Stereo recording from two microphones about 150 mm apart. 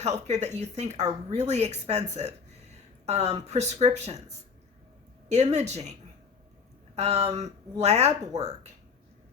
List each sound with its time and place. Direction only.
0.0 s speech: 50° right (ahead or behind)
5.3 s speech: 50° right (ahead or behind)